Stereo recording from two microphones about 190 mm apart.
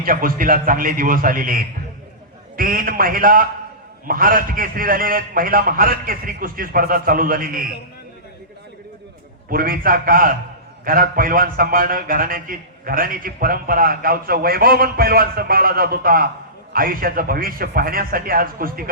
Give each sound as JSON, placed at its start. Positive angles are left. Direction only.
{"t": 0.0, "sound": "a man's voice", "side_deg": -50}
{"t": 9.5, "sound": "a man's voice", "side_deg": -50}